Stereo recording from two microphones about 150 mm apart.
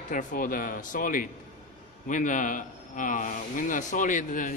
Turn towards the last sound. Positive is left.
turn(degrees=60)  # may be behind; listen again after turning